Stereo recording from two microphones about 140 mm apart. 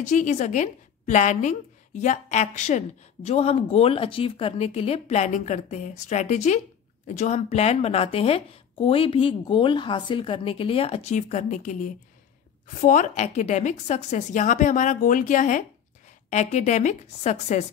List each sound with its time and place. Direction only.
0.1 s a woman's voice: 60° left (ahead or behind)